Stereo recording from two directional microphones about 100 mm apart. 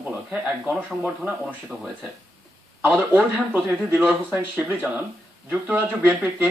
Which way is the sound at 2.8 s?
15° right (ahead or behind).